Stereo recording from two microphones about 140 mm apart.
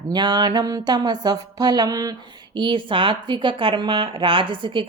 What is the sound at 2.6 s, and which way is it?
Speech, 35° right (ahead or behind).